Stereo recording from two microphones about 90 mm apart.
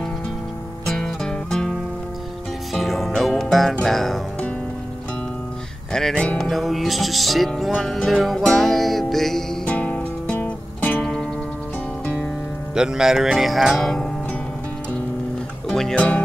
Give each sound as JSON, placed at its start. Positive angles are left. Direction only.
{"t": 0.9, "sound": "music", "side_deg": 5}
{"t": 5.9, "sound": "music", "side_deg": 10}
{"t": 9.7, "sound": "music", "side_deg": 15}
{"t": 12.7, "sound": "music", "side_deg": -5}
{"t": 15.7, "sound": "speech", "side_deg": 10}